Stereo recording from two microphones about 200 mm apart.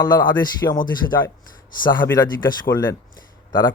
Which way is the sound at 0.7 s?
20° left (ahead or behind).